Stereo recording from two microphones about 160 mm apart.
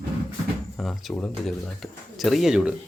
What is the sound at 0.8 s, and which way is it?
Speech, 5° left (ahead or behind).